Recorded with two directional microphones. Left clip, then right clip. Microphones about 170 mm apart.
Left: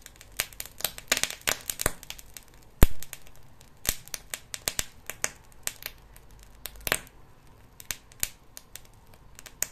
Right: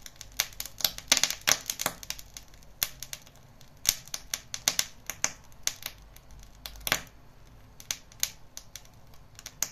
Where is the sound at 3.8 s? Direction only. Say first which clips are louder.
Right 4 dB; 30° left (ahead or behind).